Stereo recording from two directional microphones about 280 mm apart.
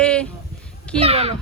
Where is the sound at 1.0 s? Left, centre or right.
Right.